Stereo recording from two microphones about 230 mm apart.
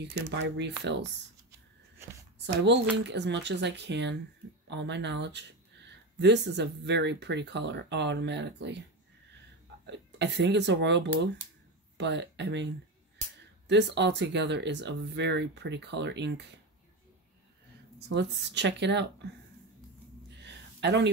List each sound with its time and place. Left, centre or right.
0.0 s speech: right
2.3 s speech: right
9.8 s speech: right
13.7 s speech: right
17.9 s speech: right
20.3 s a sound: right